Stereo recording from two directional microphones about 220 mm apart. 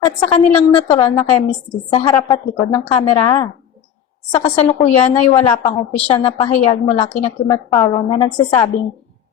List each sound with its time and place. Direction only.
0.0 s a woman's voice: 25° left (ahead or behind)
4.4 s a woman's voice: 25° left (ahead or behind)